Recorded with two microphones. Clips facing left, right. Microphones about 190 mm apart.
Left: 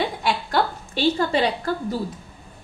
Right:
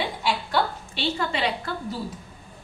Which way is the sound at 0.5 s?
40° left (ahead or behind).